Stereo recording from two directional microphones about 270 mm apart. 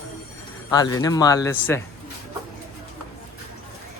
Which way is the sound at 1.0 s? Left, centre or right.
Centre.